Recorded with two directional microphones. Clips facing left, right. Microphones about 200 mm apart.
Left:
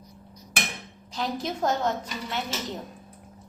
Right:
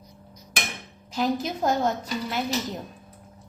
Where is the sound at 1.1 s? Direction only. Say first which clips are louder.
Right 4 dB; 5° right (ahead or behind).